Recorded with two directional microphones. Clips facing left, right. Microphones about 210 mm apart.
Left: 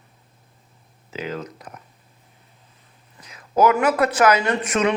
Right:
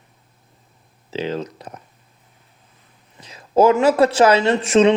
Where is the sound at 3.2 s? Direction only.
30° right (ahead or behind).